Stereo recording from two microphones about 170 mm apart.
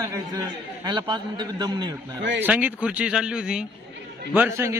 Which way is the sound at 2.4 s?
10° right (ahead or behind).